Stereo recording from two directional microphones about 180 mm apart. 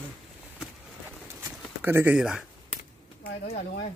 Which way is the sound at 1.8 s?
10° right (ahead or behind).